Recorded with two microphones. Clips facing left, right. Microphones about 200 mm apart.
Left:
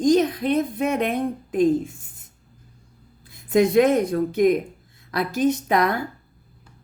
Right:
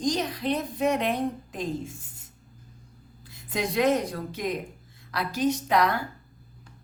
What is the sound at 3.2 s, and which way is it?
A woman's voice, 50° left (ahead or behind).